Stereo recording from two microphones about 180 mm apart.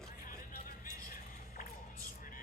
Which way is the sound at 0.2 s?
50° left (ahead or behind).